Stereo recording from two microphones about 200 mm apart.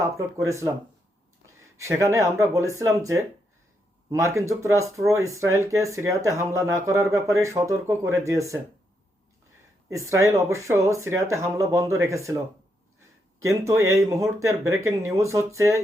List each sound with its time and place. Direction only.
0.0 s speech: 15° right (ahead or behind)
1.8 s speech: 15° right (ahead or behind)
9.9 s speech: 15° right (ahead or behind)
13.4 s speech: 15° right (ahead or behind)